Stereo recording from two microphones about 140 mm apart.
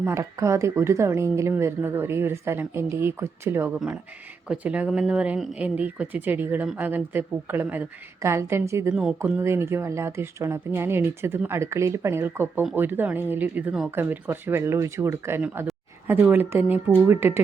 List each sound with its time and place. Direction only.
0.0 s speech: 20° right (ahead or behind)
8.9 s speech: 5° right (ahead or behind)
9.4 s speech: 20° right (ahead or behind)